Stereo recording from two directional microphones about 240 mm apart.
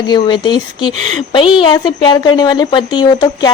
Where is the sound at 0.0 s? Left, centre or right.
Centre.